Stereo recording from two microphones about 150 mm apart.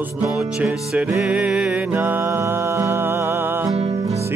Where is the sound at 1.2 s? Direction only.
5° right (ahead or behind).